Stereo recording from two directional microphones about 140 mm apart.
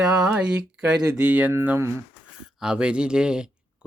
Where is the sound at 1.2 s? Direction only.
10° right (ahead or behind).